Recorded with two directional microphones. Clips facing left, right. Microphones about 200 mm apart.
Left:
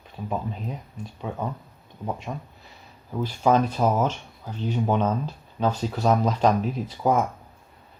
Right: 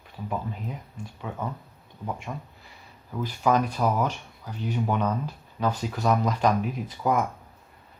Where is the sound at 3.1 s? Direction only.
25° left (ahead or behind).